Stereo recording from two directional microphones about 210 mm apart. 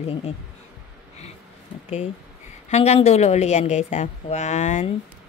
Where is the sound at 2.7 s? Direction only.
30° left (ahead or behind).